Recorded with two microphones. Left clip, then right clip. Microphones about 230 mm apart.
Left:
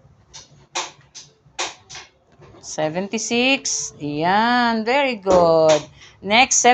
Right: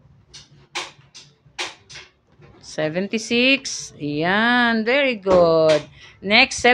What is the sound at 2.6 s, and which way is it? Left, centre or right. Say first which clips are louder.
Speech: left 1 dB; right.